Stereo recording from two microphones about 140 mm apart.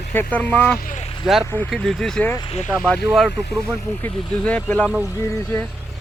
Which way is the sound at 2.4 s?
50° left (ahead or behind).